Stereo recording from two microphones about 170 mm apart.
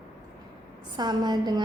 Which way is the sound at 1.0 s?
25° right (ahead or behind).